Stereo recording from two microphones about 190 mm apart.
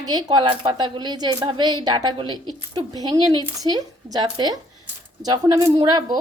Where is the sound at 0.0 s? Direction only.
20° right (ahead or behind).